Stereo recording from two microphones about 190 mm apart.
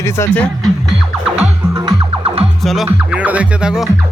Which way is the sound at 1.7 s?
25° right (ahead or behind).